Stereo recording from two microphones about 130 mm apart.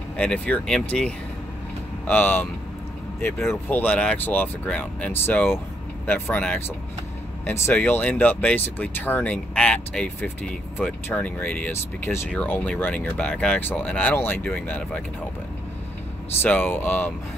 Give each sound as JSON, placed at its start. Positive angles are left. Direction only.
{"t": 0.2, "sound": "speech", "side_deg": 10}
{"t": 2.0, "sound": "speech", "side_deg": 15}
{"t": 16.4, "sound": "speech", "side_deg": 15}